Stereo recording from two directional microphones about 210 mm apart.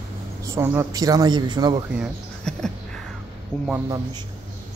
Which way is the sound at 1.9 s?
Centre (ahead or behind).